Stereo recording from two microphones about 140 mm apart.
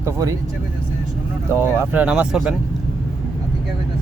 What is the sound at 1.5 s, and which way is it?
Speech, 15° right (ahead or behind).